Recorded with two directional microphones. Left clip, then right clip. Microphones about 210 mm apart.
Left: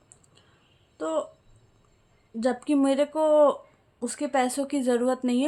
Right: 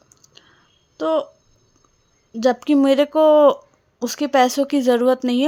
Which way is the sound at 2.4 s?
35° right (ahead or behind).